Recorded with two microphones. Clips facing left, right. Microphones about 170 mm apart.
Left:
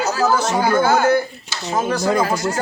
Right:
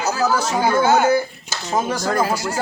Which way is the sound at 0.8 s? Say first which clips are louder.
Right 3 dB; 20° right (ahead or behind).